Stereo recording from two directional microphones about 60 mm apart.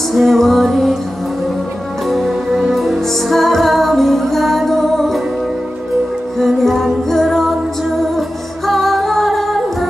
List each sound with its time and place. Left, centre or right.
0.1 s female singing: centre
2.0 s music: centre
6.3 s music: centre